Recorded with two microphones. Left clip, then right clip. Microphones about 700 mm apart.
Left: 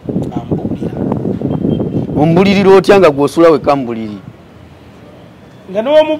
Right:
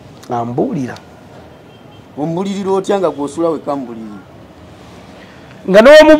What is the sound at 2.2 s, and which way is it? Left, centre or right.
A man's voice, left.